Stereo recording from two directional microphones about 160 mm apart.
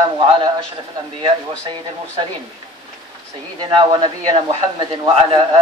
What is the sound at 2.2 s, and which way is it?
Speech, 35° right (ahead or behind).